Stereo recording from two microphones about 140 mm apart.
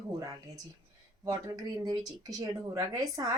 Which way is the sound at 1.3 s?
25° right (ahead or behind).